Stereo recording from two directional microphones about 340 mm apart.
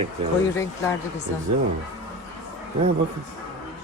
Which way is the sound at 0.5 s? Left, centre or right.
Centre.